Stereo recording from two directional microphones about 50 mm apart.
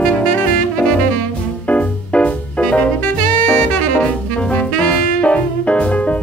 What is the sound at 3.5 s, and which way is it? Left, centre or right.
Saxophone, left.